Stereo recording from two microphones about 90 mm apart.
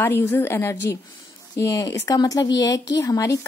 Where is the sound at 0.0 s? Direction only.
25° left (ahead or behind).